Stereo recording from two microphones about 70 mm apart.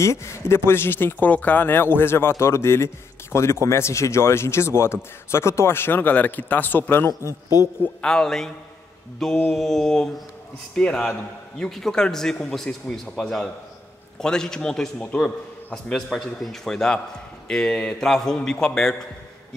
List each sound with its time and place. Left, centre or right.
0.0 s speech: left
8.0 s a man's voice: centre
9.5 s a man's voice: centre
14.2 s a man's voice: centre